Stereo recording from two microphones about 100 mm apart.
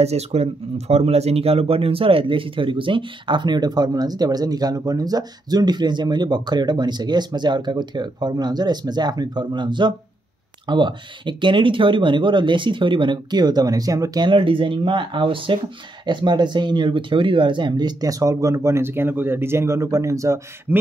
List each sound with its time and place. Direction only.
0.0 s speech: 90° right; by 14.2 s 35° right (ahead or behind)
14.2 s speech: 60° right (ahead or behind); by 20.8 s 30° right (ahead or behind)